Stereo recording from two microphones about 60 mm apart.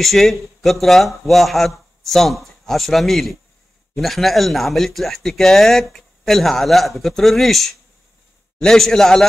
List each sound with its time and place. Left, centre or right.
0.0 s a man's voice: centre